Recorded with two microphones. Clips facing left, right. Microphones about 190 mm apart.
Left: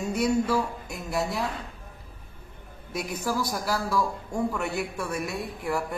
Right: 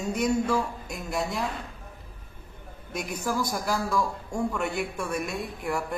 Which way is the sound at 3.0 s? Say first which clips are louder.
Even; 5° left (ahead or behind).